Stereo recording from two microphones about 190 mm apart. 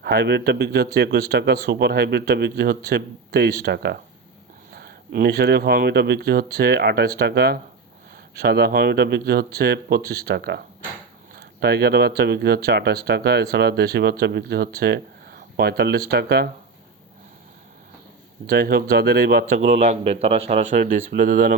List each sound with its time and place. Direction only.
0.0 s speech: 55° right (ahead or behind)
18.4 s speech: 55° right (ahead or behind)